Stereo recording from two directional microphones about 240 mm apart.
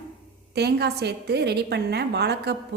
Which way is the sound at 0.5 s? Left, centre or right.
Right.